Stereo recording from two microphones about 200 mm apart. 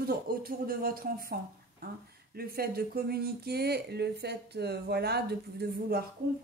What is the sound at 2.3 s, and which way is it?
A woman's voice, 50° right (ahead or behind).